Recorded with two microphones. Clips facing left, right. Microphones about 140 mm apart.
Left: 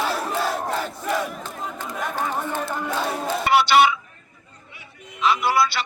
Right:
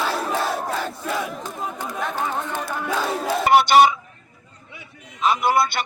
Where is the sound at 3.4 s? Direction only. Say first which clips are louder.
Right 3 dB; 50° right (ahead or behind).